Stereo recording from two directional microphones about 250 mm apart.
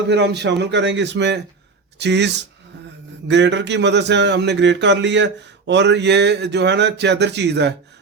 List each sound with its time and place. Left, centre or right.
0.1 s speech: right